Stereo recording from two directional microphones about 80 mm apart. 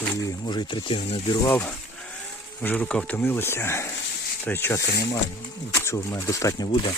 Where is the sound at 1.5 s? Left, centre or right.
Left.